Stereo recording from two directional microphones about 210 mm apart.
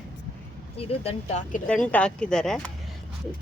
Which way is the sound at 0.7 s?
30° left (ahead or behind).